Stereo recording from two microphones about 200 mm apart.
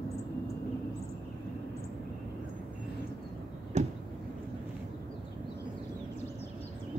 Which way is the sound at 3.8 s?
35° right (ahead or behind).